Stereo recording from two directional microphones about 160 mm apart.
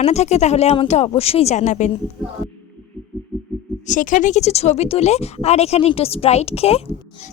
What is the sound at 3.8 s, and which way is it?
A woman's voice, 55° left (ahead or behind).